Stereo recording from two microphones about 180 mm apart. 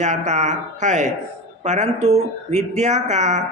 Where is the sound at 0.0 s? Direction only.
40° right (ahead or behind).